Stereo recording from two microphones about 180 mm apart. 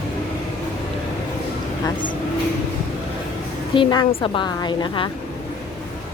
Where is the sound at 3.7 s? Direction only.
25° left (ahead or behind).